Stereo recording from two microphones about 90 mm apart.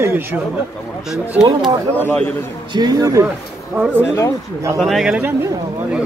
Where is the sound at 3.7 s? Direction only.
15° right (ahead or behind).